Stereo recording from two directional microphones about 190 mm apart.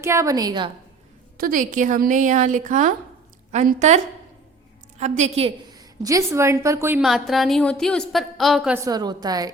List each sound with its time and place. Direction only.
0.0 s a woman's voice: 15° right (ahead or behind)
1.4 s a woman's voice: 45° right (ahead or behind); by 7.0 s 15° right (ahead or behind)
7.0 s a woman's voice: centre (ahead or behind)
8.8 s a woman's voice: 20° right (ahead or behind)